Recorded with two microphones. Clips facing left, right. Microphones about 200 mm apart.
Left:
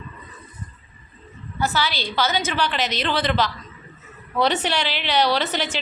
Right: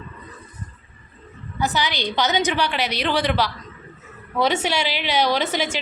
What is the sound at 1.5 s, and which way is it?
A woman's voice, 15° right (ahead or behind).